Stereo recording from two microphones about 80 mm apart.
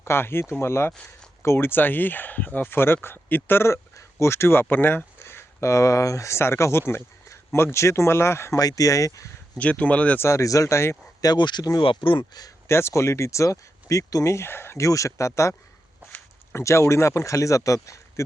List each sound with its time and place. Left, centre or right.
0.0 s speech: left
8.6 s speech: left
9.6 s speech: centre
10.2 s speech: left
11.3 s speech: left
11.8 s speech: left
12.6 s speech: left
16.6 s speech: left